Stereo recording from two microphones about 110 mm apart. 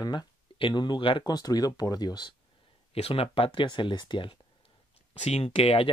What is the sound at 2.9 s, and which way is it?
Speech, 60° left (ahead or behind).